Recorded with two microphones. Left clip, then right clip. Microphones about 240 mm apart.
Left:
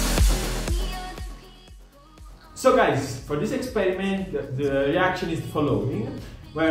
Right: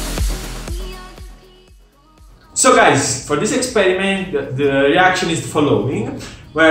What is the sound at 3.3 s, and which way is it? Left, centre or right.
A man's voice, centre.